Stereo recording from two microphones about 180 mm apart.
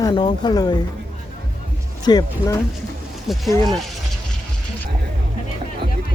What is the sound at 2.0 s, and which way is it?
Speech, 20° left (ahead or behind).